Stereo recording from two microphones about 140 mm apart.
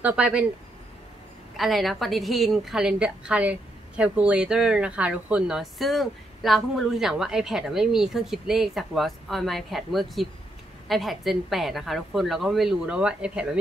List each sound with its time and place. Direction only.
0.0 s speech: 10° right (ahead or behind)
1.6 s a woman's voice: centre (ahead or behind)